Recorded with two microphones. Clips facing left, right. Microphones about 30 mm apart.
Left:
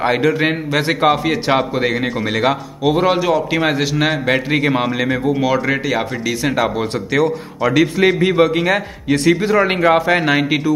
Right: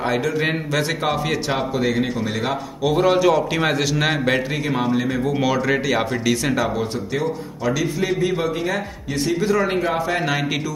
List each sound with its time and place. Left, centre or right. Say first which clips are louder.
0.0 s a man's voice: left 5 dB; left
1.5 s a man's voice: left 6 dB; left
2.8 s a man's voice: left 1 dB; left
4.5 s a man's voice: left 6 dB; left
5.5 s a man's voice: left 2 dB; centre
7.2 s a man's voice: left 9 dB; left
9.4 s a man's voice: left 4 dB; left
9.7 s a man's voice: left 7 dB; left
10.0 s a man's voice: left 7 dB; left